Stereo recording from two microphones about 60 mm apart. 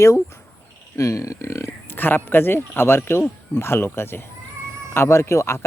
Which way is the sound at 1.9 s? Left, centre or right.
Left.